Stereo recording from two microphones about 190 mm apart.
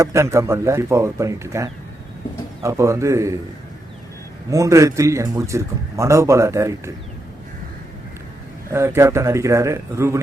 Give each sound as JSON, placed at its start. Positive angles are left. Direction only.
{"t": 0.0, "sound": "speech", "side_deg": -15}
{"t": 4.5, "sound": "speech", "side_deg": -15}
{"t": 8.7, "sound": "speech", "side_deg": -15}